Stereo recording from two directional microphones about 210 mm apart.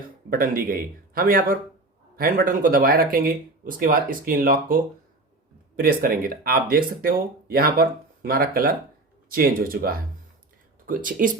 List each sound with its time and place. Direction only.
0.3 s speech: 45° right (ahead or behind)